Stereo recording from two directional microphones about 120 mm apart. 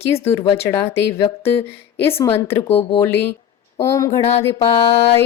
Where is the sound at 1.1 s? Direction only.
55° left (ahead or behind).